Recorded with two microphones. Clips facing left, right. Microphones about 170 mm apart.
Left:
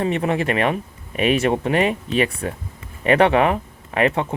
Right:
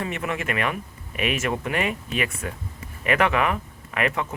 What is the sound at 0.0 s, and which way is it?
Speech, 30° left (ahead or behind).